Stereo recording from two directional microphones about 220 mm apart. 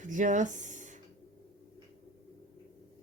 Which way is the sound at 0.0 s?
35° right (ahead or behind).